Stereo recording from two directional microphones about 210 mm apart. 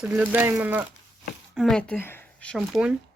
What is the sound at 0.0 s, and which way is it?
Speech, 5° right (ahead or behind).